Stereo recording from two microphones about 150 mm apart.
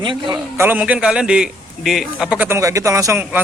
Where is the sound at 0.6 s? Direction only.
10° right (ahead or behind).